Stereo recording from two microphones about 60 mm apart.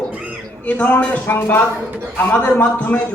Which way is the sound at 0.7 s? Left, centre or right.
Left.